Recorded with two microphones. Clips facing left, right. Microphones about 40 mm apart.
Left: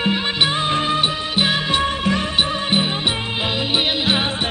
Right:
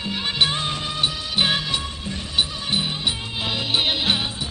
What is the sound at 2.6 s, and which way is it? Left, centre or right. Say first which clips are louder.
Music: left 5 dB; left.